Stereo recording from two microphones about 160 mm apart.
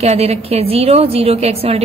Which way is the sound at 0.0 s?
40° right (ahead or behind).